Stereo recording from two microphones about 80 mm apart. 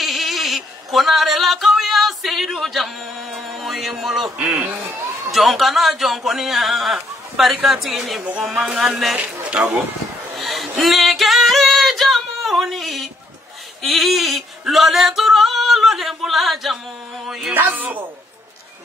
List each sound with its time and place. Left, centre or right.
0.0 s a sound: centre
3.6 s speech: centre
4.4 s a man's voice: centre
5.3 s speech: centre
9.1 s a man's voice: centre
10.3 s singing: centre
13.8 s male singing: centre
17.3 s a sound: centre
17.7 s a man's voice: right